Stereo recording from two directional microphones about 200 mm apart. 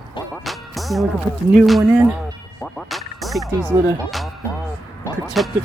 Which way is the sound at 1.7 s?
Centre (ahead or behind).